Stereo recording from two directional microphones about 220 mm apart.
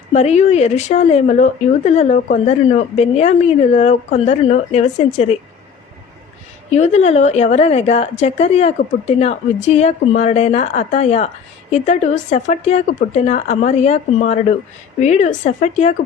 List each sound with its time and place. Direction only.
0.1 s speech: 30° left (ahead or behind)
6.7 s a woman's voice: 30° left (ahead or behind)
15.0 s speech: 30° left (ahead or behind)